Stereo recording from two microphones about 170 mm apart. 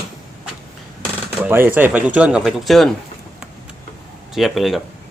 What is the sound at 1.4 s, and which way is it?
Speech, 10° right (ahead or behind).